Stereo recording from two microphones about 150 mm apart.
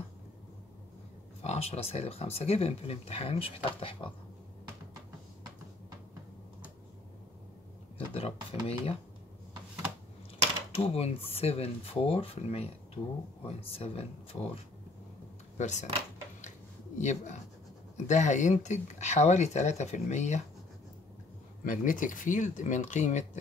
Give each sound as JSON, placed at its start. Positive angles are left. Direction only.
{"t": 1.4, "sound": "speech", "side_deg": 45}
{"t": 8.1, "sound": "speech", "side_deg": 40}
{"t": 10.9, "sound": "speech", "side_deg": 40}
{"t": 15.5, "sound": "speech", "side_deg": 50}
{"t": 17.0, "sound": "speech", "side_deg": 50}
{"t": 21.6, "sound": "speech", "side_deg": 60}